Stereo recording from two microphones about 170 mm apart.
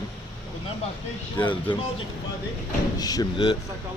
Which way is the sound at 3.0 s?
20° left (ahead or behind).